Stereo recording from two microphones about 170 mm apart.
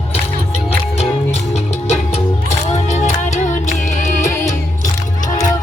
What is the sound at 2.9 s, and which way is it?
Music, 45° left (ahead or behind).